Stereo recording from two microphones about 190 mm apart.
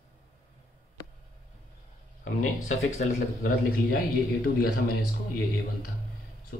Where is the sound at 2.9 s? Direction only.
40° left (ahead or behind).